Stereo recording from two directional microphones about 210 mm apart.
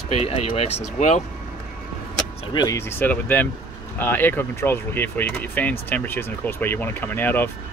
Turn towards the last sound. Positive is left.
turn(degrees=10)  # may be behind; listen again after turning